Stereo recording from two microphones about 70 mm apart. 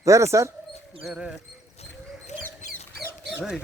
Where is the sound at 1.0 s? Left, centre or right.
Centre.